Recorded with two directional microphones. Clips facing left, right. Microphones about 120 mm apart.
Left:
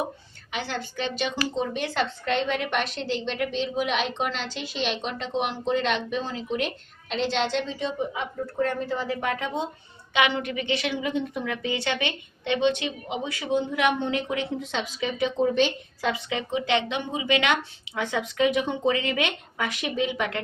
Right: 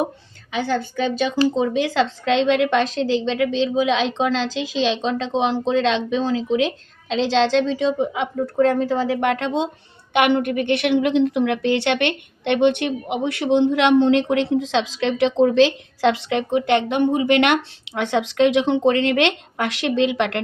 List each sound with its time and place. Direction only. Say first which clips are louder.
1.6 s a woman's voice: right 8 dB; 90° right
10.1 s a woman's voice: right 7 dB; 60° right (ahead or behind); by 20.4 s 75° right (ahead or behind)